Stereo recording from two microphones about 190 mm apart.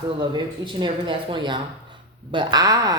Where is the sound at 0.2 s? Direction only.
25° right (ahead or behind).